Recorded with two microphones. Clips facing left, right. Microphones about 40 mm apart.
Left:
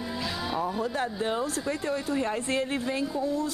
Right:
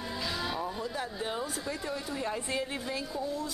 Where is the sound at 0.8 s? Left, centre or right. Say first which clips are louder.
Left 6 dB; left.